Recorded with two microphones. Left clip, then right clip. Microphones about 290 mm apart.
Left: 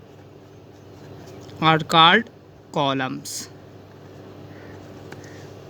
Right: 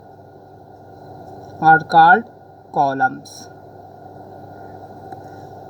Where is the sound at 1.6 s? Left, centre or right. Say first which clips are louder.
Right 5 dB; left.